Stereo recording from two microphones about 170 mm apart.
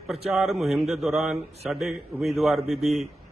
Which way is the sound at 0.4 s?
Centre (ahead or behind).